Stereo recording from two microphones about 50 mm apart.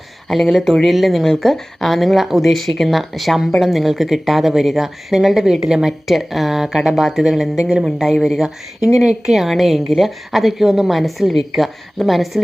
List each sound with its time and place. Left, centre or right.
0.3 s speech: centre